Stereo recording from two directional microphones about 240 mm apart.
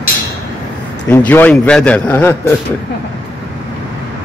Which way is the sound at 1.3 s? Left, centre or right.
Centre.